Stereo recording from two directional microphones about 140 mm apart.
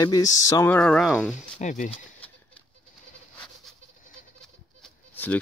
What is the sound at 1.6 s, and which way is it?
Speech, 60° left (ahead or behind).